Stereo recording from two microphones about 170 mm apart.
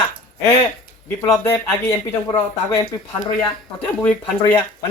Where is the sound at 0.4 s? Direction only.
15° left (ahead or behind).